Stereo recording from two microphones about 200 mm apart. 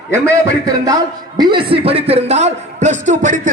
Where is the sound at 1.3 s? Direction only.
25° right (ahead or behind).